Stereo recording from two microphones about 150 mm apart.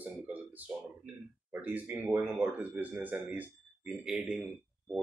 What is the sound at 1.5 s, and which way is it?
Speech, 10° right (ahead or behind).